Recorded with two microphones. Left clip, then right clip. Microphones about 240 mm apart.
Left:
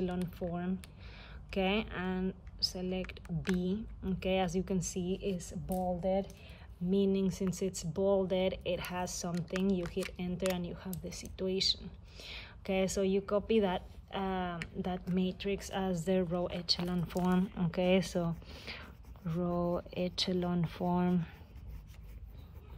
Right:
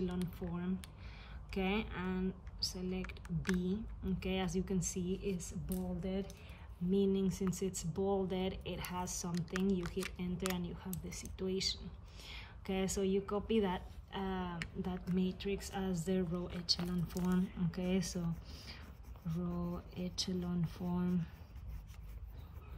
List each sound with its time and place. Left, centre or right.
0.0 s a woman's voice: centre
5.1 s a woman's voice: centre
9.8 s a woman's voice: centre